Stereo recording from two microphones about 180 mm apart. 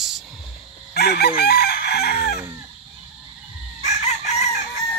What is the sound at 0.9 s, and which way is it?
Chicken, 60° left (ahead or behind).